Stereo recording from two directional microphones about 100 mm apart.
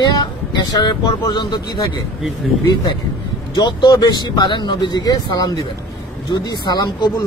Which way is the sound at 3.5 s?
45° left (ahead or behind).